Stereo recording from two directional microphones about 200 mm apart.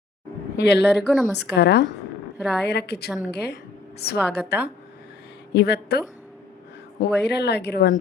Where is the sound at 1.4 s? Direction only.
55° left (ahead or behind).